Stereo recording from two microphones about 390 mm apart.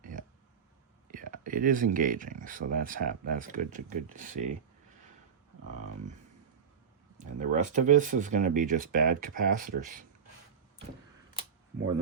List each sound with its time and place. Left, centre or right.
0.0 s a sound: centre
1.1 s speech: right
7.5 s speech: centre